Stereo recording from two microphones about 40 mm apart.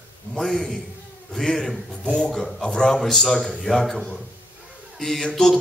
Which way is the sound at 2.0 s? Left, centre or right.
Left.